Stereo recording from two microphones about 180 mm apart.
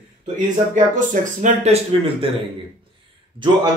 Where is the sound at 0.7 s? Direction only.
45° right (ahead or behind).